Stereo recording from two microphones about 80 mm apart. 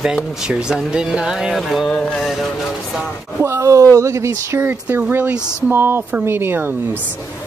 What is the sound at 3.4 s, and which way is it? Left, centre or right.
Speech, right.